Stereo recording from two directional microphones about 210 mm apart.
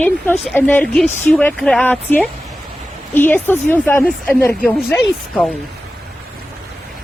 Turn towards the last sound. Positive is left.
turn(degrees=5)  # may be behind; listen again after turning